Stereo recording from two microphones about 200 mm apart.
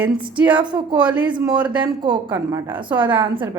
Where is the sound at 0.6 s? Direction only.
25° right (ahead or behind).